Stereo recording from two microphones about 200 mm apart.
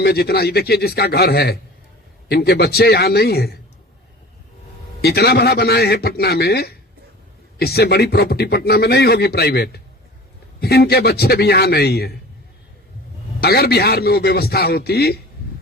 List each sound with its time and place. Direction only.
0.0 s a man's voice: 50° left (ahead or behind)
4.9 s a man's voice: 55° left (ahead or behind)
13.4 s a man's voice: 50° left (ahead or behind)